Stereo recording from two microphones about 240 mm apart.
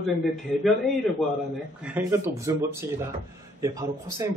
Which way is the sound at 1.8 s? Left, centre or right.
Centre.